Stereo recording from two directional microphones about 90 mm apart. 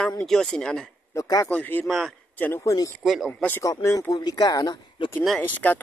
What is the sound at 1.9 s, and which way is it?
Speech, centre (ahead or behind).